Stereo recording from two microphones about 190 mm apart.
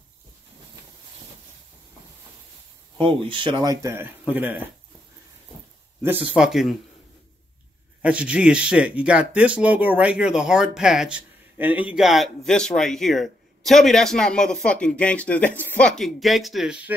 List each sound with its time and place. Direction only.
3.0 s speech: 25° right (ahead or behind); by 4.6 s 10° right (ahead or behind)
6.0 s speech: 5° right (ahead or behind)
8.0 s speech: 5° right (ahead or behind)